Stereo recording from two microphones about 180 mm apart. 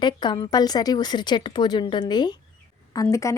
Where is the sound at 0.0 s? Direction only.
25° left (ahead or behind).